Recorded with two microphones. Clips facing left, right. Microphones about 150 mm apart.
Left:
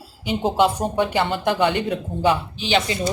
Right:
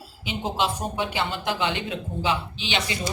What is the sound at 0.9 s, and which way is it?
Speech, 50° left (ahead or behind).